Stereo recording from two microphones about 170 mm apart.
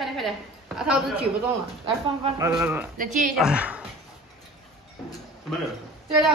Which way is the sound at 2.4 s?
15° right (ahead or behind).